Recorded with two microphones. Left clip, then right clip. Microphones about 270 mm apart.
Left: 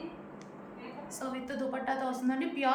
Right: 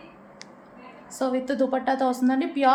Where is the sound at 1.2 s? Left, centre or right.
Right.